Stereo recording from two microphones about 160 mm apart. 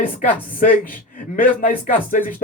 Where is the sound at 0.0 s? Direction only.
60° left (ahead or behind).